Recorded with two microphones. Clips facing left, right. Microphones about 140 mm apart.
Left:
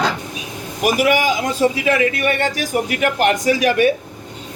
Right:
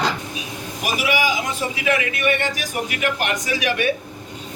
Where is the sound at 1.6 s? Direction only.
35° left (ahead or behind).